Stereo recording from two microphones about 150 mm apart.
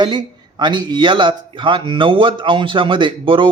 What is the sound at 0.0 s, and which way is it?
A man's voice, 30° right (ahead or behind).